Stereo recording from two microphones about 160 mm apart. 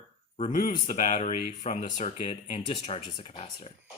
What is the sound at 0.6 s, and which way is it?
Speech, 50° left (ahead or behind).